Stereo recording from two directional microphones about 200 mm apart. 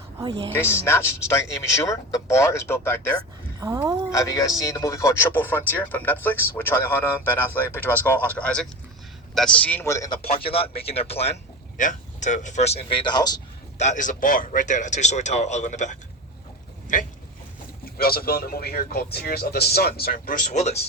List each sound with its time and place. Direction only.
0.2 s speech: 25° right (ahead or behind)
0.5 s a man's voice: 10° left (ahead or behind)
3.6 s speech: 15° right (ahead or behind)
4.1 s a man's voice: 15° left (ahead or behind)
10.8 s speech: 30° left (ahead or behind)
13.7 s speech: 35° left (ahead or behind)
17.8 s speech: 50° left (ahead or behind)